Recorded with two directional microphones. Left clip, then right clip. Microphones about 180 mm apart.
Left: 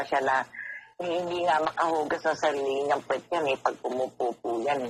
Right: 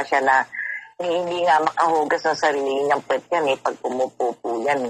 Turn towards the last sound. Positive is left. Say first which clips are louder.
# right 6 dB
turn(degrees=-35)  # may be behind; listen again after turning